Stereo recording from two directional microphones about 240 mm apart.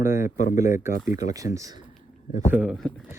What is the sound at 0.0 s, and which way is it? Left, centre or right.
Speech, centre.